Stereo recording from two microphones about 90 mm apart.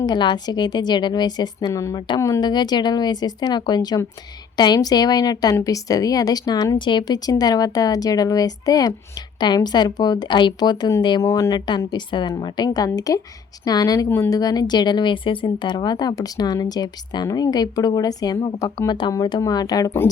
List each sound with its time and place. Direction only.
0.0 s speech: 55° left (ahead or behind)
1.7 s speech: 35° left (ahead or behind)
2.0 s speech: 55° left (ahead or behind)
11.2 s a woman's voice: 40° left (ahead or behind)